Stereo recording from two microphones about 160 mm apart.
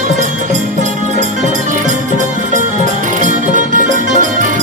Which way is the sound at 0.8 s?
50° right (ahead or behind).